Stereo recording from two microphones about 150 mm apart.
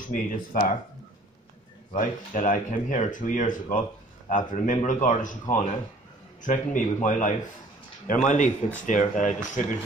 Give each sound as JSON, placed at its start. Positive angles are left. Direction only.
{"t": 0.1, "sound": "speech", "side_deg": 60}
{"t": 2.0, "sound": "speech", "side_deg": 60}